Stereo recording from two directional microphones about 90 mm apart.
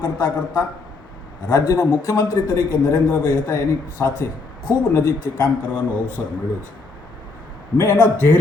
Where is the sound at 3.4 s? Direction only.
25° left (ahead or behind).